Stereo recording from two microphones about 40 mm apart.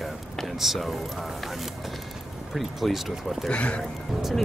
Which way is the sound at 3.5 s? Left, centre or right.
Left.